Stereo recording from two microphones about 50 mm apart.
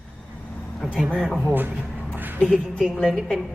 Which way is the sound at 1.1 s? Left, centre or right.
Centre.